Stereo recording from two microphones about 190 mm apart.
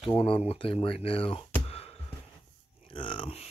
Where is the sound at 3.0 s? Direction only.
25° left (ahead or behind).